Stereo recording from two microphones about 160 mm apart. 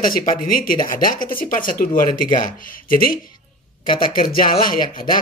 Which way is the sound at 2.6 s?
60° left (ahead or behind).